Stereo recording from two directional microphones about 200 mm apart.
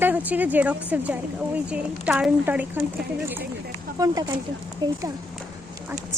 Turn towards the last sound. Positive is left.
turn(degrees=-20)  # may be behind; listen again after turning